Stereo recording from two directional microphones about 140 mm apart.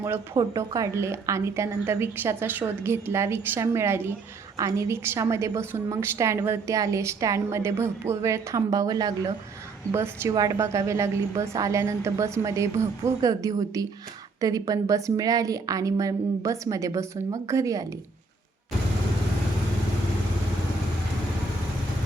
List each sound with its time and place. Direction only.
0.0 s a woman's voice: 20° right (ahead or behind)